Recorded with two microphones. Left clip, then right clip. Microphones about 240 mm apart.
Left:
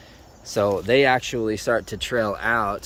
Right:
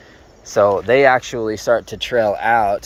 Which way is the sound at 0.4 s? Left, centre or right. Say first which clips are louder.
Right 7 dB; centre.